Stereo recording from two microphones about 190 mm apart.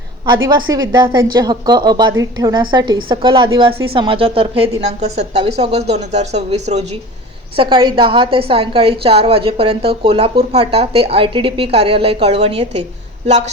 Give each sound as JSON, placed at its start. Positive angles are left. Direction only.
{"t": 0.4, "sound": "a woman's voice", "side_deg": -20}
{"t": 7.5, "sound": "a woman's voice", "side_deg": -25}